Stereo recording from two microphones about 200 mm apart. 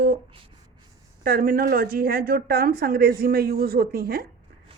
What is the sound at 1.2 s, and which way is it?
Speech, 50° right (ahead or behind).